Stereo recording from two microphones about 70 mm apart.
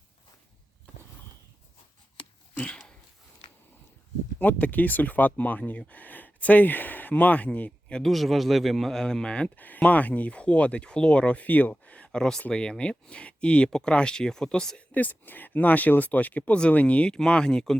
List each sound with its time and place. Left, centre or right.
4.4 s speech: left
8.0 s a man's voice: centre
14.9 s a man's voice: left